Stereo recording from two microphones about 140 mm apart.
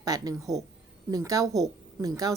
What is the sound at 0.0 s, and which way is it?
A woman's voice, 25° right (ahead or behind).